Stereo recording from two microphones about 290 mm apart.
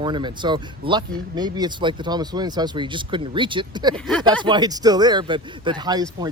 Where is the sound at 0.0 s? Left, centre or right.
Centre.